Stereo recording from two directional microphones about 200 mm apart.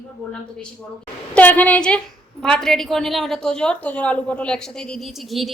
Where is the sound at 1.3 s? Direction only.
5° left (ahead or behind).